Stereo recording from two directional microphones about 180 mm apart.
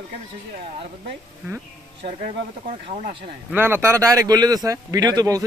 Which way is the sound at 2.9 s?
35° right (ahead or behind).